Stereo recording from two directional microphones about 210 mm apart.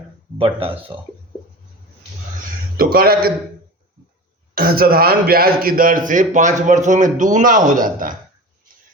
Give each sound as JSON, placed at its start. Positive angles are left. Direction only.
{"t": 0.3, "sound": "speech", "side_deg": -25}
{"t": 2.7, "sound": "a man's voice", "side_deg": -45}
{"t": 4.5, "sound": "speech", "side_deg": -45}